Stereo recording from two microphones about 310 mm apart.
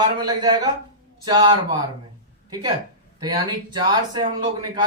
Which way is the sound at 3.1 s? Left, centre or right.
Centre.